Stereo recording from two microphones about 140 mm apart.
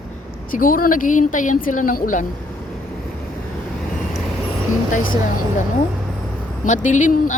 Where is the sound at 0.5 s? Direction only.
80° left.